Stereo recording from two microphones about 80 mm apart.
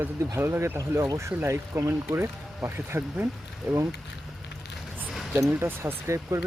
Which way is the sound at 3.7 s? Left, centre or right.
Centre.